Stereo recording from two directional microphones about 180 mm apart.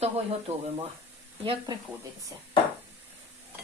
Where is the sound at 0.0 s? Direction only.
30° right (ahead or behind).